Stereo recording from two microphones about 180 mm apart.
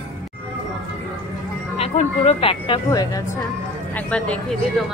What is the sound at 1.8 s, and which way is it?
Speech, 35° left (ahead or behind).